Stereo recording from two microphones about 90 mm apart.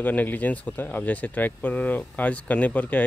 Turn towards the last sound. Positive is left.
turn(degrees=15)  # may be behind; listen again after turning